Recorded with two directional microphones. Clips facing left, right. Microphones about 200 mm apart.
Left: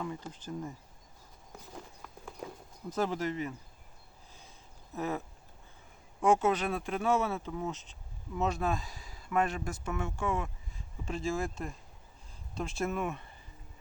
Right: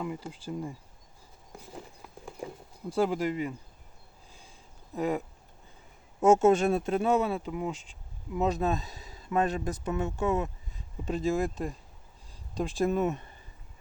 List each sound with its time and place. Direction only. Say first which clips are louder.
0.0 s speech: right 3 dB; 10° right (ahead or behind)
1.5 s clip-clop: right 3 dB; 10° right (ahead or behind)
2.9 s speech: right 5 dB; 10° right (ahead or behind)
4.9 s speech: right 5 dB; 15° right (ahead or behind)
6.4 s speech: right 7 dB; 45° right (ahead or behind)
6.7 s speech: right 5 dB; 25° right (ahead or behind)
12.5 s speech: right 6 dB; 35° right (ahead or behind)
13.0 s speech: right 7 dB; 20° right (ahead or behind)